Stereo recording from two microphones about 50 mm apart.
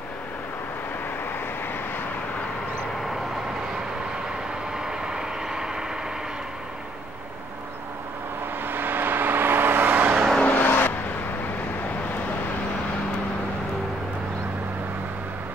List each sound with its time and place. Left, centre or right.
4.7 s vehicle: centre
8.6 s vehicle: right
10.4 s vehicle: left